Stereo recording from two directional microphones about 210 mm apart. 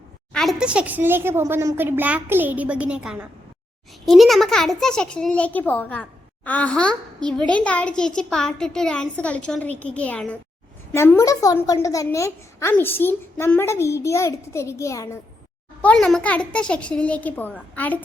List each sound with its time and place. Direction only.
0.3 s a woman's voice: centre (ahead or behind)